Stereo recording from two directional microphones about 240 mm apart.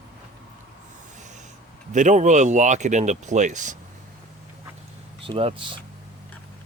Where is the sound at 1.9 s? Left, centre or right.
Right.